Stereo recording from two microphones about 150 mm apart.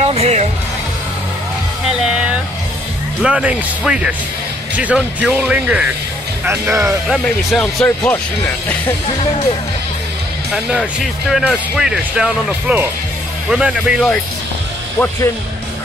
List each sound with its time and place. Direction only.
0.0 s music: 45° right (ahead or behind)
3.2 s speech: 5° right (ahead or behind)
7.1 s speech: centre (ahead or behind)
10.5 s speech: 5° right (ahead or behind)